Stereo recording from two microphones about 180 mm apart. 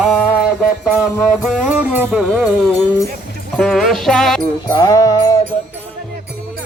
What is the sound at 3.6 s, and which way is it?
Music, centre (ahead or behind).